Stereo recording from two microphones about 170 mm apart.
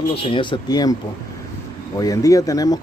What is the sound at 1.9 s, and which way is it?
Speech, 20° left (ahead or behind).